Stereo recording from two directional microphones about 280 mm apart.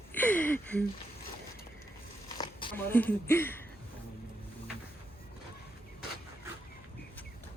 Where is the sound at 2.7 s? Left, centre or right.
Centre.